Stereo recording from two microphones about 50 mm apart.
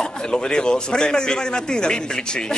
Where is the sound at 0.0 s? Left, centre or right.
Centre.